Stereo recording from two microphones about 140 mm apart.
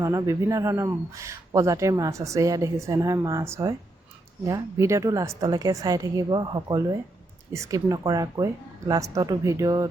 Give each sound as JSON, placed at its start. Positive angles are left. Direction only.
{"t": 0.0, "sound": "speech", "side_deg": -25}